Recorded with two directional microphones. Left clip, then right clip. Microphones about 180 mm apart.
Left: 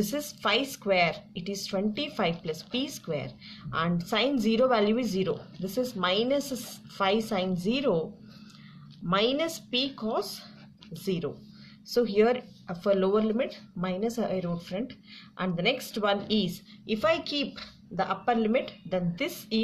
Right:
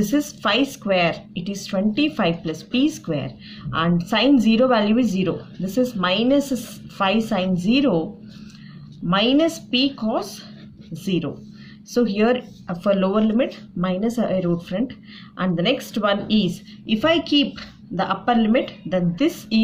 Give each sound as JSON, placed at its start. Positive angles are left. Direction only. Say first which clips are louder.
{"t": 0.0, "sound": "a woman's voice", "louder": "right 8 dB", "side_deg": 30}
{"t": 9.1, "sound": "a woman's voice", "louder": "right 8 dB", "side_deg": 35}
{"t": 11.9, "sound": "a woman's voice", "louder": "right 4 dB", "side_deg": 35}